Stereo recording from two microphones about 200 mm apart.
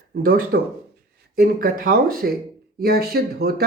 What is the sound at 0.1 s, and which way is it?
Speech, 45° right (ahead or behind).